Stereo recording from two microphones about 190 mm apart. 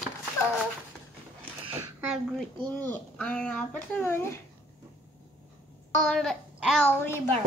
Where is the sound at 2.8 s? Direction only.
5° left (ahead or behind).